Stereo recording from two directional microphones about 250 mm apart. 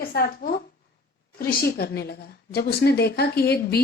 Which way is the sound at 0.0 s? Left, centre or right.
Left.